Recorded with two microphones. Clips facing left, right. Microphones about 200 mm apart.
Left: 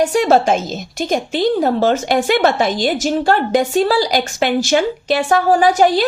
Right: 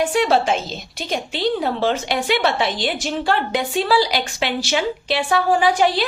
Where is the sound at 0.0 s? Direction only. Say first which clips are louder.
Left 4 dB; 45° left (ahead or behind).